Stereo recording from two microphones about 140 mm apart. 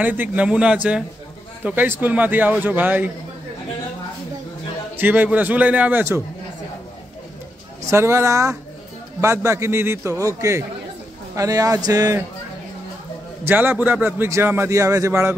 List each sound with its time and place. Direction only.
0.0 s a man's voice: 15° right (ahead or behind)
4.9 s a man's voice: 15° right (ahead or behind)
7.9 s a man's voice: 20° right (ahead or behind)
13.5 s a man's voice: 15° right (ahead or behind)